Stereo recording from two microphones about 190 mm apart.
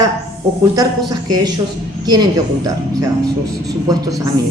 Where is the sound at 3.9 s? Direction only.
20° right (ahead or behind).